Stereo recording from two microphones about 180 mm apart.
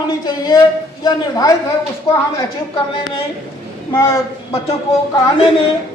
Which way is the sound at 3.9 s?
15° left (ahead or behind).